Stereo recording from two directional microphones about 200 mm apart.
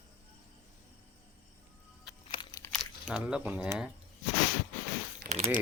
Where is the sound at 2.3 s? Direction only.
20° left (ahead or behind).